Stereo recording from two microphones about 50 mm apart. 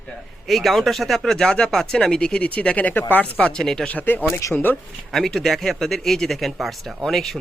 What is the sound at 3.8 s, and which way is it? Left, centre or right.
Speech, left.